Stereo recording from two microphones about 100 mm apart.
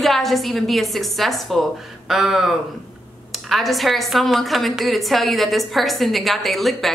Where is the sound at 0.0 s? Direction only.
Centre (ahead or behind).